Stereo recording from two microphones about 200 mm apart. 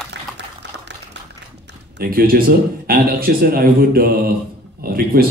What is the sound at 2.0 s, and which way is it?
A man's voice, 50° right (ahead or behind).